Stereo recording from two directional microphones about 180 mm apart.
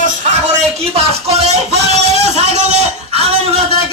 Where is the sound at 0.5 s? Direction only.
35° right (ahead or behind).